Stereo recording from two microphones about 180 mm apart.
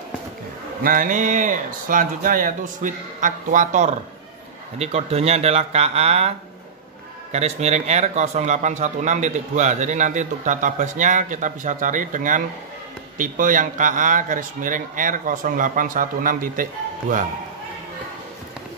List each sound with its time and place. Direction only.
0.8 s speech: 50° right (ahead or behind)
7.3 s speech: 35° right (ahead or behind)